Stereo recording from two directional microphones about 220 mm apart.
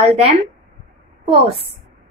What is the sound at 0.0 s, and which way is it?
Speech, 25° right (ahead or behind).